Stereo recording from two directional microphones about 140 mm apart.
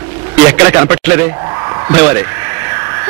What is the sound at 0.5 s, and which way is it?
Speech, 15° right (ahead or behind).